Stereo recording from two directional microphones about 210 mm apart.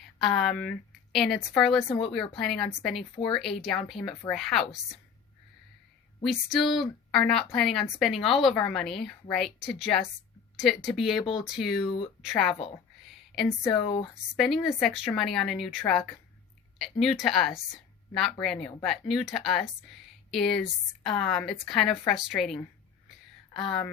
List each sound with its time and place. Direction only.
0.2 s a woman's voice: centre (ahead or behind)
6.2 s a woman's voice: centre (ahead or behind)
13.1 s a sound: centre (ahead or behind)
13.8 s speech: 25° left (ahead or behind)
14.3 s a woman's voice: centre (ahead or behind)